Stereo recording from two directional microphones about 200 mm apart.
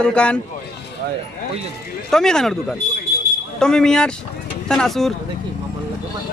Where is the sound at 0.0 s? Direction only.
5° left (ahead or behind).